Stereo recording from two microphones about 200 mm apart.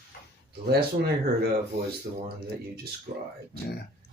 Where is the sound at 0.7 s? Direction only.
50° right (ahead or behind).